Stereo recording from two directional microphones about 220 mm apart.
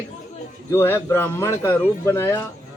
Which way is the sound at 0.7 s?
10° left (ahead or behind).